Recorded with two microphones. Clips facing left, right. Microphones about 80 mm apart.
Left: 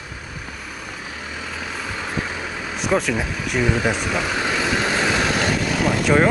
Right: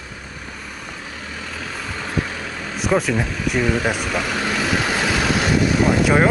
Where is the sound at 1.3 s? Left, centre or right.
Centre.